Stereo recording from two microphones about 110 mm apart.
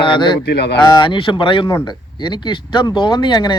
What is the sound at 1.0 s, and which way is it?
Speech, 50° left (ahead or behind).